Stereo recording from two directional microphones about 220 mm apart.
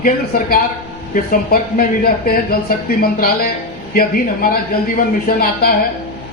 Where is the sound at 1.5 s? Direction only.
40° left (ahead or behind).